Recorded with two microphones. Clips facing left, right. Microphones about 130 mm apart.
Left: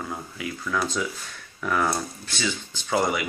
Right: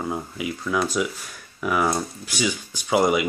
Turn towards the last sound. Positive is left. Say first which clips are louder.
# right 4 dB
turn(degrees=-20)  # may be behind; listen again after turning